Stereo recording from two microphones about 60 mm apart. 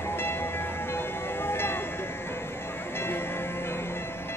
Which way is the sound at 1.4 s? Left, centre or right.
Left.